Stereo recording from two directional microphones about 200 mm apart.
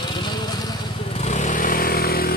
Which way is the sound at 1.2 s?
35° left (ahead or behind).